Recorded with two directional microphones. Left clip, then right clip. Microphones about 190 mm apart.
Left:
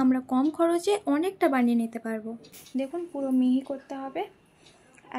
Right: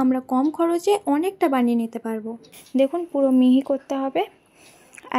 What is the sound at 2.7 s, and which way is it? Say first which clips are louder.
A woman's voice: right 11 dB; 45° right (ahead or behind).